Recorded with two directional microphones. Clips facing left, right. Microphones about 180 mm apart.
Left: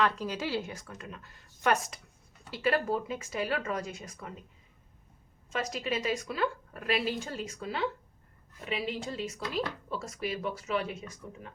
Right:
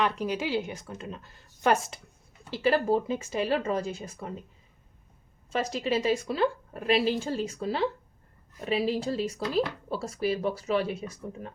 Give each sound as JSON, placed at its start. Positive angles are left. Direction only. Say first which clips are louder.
{"t": 0.0, "sound": "a woman's voice", "louder": "right 2 dB", "side_deg": -15}
{"t": 5.5, "sound": "a woman's voice", "louder": "right 5 dB", "side_deg": -30}